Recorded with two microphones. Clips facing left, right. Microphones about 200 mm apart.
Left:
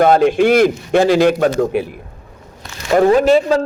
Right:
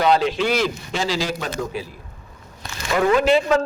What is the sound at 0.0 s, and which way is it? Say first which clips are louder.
A man's voice: left 7 dB; 50° left (ahead or behind).